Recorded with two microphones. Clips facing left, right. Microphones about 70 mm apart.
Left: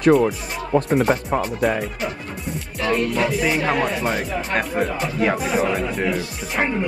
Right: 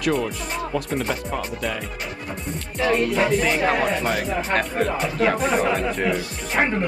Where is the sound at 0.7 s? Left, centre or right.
Left.